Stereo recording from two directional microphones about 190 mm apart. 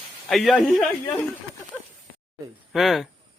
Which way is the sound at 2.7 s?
Centre (ahead or behind).